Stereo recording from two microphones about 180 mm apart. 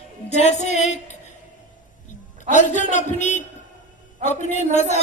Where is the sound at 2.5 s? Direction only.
45° left (ahead or behind).